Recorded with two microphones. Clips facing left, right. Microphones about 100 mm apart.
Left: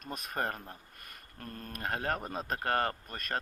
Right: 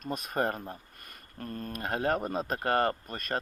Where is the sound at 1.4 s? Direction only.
5° right (ahead or behind).